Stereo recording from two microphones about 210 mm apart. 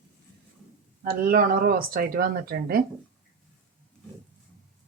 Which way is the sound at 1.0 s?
45° right (ahead or behind).